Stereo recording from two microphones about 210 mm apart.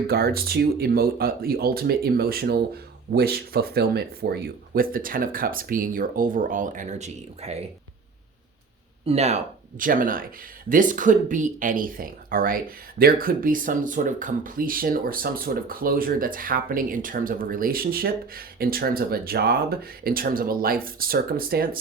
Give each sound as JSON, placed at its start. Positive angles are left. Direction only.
{"t": 0.1, "sound": "speech", "side_deg": -45}
{"t": 9.0, "sound": "speech", "side_deg": -30}